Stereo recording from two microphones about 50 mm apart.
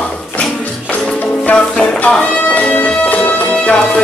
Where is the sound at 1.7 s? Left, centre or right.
Centre.